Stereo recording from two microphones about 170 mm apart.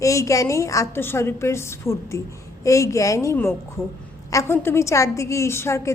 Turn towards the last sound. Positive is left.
turn(degrees=15)  # may be behind; listen again after turning